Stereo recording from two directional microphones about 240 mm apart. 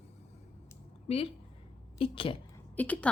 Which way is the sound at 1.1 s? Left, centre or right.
Left.